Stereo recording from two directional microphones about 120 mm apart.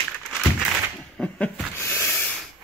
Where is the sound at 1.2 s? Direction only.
10° left (ahead or behind).